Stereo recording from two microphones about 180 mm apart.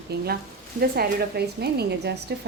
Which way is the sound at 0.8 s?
60° right (ahead or behind).